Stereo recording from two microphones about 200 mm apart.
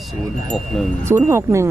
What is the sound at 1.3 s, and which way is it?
Speech, 15° right (ahead or behind).